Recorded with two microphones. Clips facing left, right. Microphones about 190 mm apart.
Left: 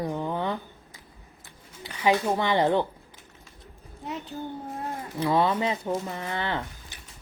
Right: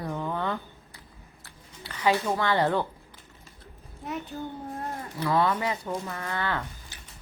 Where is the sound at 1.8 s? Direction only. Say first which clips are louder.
Left 2 dB; 15° left (ahead or behind).